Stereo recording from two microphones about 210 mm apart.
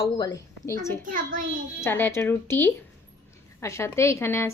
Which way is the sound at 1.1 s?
40° right (ahead or behind).